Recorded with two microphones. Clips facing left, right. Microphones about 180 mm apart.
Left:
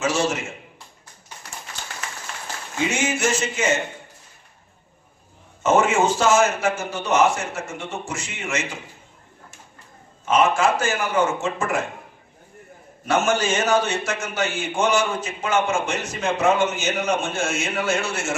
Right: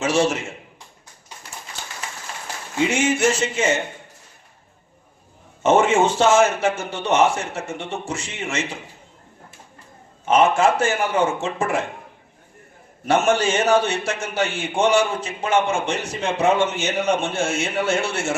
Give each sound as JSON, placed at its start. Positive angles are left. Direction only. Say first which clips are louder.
{"t": 0.0, "sound": "a man's voice", "louder": "right 3 dB", "side_deg": -30}
{"t": 2.9, "sound": "a man's voice", "louder": "right 4 dB", "side_deg": -30}
{"t": 5.6, "sound": "a man's voice", "louder": "right 2 dB", "side_deg": -30}
{"t": 10.2, "sound": "a man's voice", "louder": "right 2 dB", "side_deg": -30}
{"t": 13.1, "sound": "a man's voice", "louder": "right 2 dB", "side_deg": -30}